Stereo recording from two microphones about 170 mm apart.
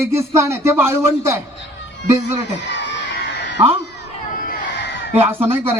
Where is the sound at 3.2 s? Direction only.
80° left.